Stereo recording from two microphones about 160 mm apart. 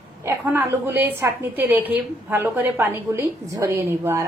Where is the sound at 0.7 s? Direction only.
15° right (ahead or behind).